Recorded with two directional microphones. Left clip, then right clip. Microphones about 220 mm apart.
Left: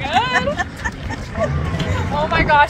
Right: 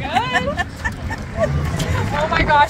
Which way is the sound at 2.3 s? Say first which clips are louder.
Left 1 dB; 20° left (ahead or behind).